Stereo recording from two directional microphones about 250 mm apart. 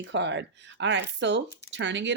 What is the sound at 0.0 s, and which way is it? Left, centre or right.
Speech, right.